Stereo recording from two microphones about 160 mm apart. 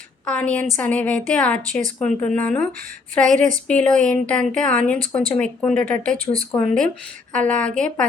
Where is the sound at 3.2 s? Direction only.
50° right (ahead or behind).